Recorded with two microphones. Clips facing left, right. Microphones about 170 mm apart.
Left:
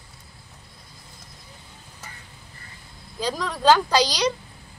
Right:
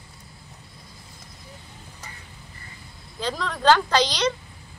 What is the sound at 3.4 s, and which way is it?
Speech, 10° left (ahead or behind).